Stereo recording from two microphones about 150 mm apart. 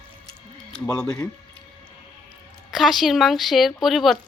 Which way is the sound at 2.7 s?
Centre (ahead or behind).